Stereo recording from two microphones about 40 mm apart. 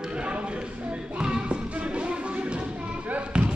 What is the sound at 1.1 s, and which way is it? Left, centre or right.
Music, right.